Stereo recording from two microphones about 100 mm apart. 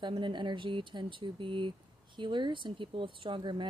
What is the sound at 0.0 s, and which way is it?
Speech, 50° right (ahead or behind).